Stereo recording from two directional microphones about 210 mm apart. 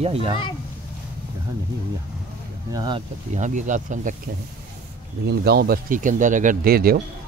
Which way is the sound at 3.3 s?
35° right (ahead or behind).